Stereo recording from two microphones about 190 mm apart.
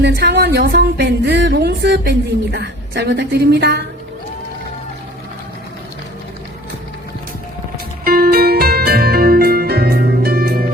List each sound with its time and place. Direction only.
0.0 s a woman's voice: 60° right (ahead or behind)
8.0 s music: 50° right (ahead or behind)